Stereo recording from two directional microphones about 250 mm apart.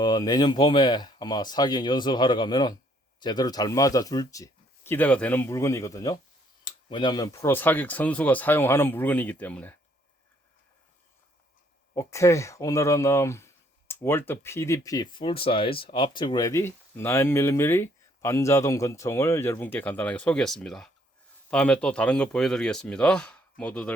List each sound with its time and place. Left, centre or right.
0.0 s speech: centre
11.9 s speech: centre